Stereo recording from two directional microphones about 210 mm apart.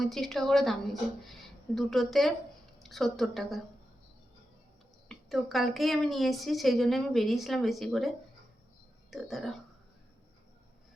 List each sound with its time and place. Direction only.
0.0 s a woman's voice: centre (ahead or behind)
5.0 s a woman's voice: centre (ahead or behind)